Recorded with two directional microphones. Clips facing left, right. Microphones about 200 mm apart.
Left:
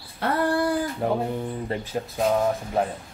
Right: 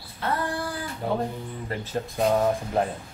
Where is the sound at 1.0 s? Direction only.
65° left (ahead or behind).